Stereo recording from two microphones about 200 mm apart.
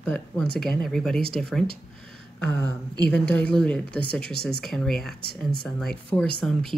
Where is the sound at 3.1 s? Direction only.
5° left (ahead or behind).